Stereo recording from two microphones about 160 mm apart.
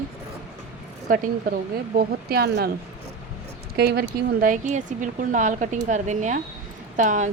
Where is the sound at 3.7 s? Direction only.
85° right; by 7.3 s 50° right (ahead or behind).